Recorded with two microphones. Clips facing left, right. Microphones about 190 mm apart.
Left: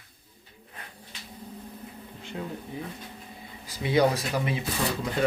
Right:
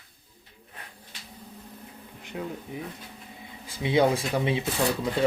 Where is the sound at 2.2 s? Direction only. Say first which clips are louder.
Right 1 dB; 15° right (ahead or behind).